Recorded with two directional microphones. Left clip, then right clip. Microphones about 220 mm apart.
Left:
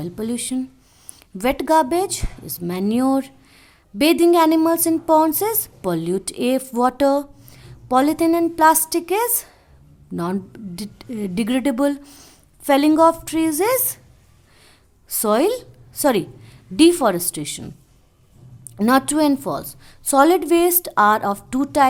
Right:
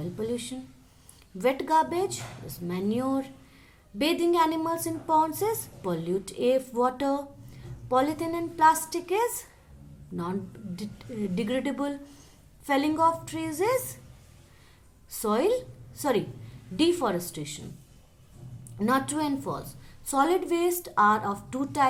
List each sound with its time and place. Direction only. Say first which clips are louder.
0.0 s a woman's voice: left 5 dB; 50° left (ahead or behind)
10.8 s a woman's voice: left 6 dB; 50° left (ahead or behind)
15.1 s a woman's voice: left 7 dB; 50° left (ahead or behind)
18.8 s a woman's voice: left 10 dB; 50° left (ahead or behind)